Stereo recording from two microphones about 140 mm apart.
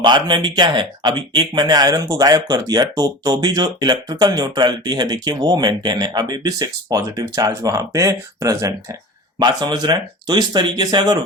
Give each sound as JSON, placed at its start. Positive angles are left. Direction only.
{"t": 0.0, "sound": "speech", "side_deg": -35}